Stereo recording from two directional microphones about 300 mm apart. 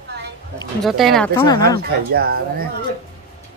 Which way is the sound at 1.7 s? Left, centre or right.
Right.